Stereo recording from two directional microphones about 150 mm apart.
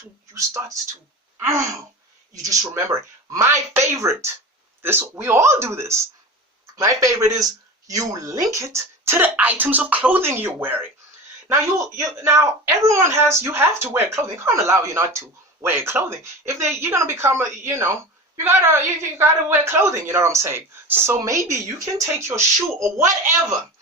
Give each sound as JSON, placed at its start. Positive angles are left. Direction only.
{"t": 0.3, "sound": "speech", "side_deg": -20}